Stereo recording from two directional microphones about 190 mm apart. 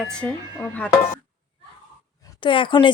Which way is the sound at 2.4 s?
25° left (ahead or behind).